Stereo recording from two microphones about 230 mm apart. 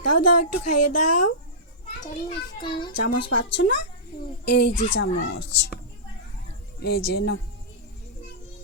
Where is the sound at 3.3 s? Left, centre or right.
Left.